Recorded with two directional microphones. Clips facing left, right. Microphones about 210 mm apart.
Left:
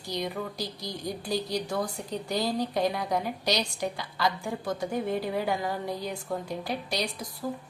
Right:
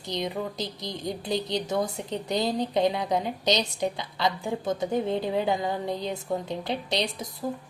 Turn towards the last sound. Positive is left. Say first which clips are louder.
# right 3 dB
turn(degrees=-20)  # may be behind; listen again after turning